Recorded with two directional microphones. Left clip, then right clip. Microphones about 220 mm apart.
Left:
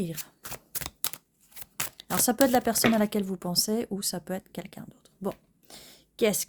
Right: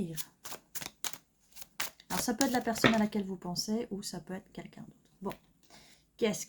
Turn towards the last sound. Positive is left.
turn(degrees=50)  # may be behind; listen again after turning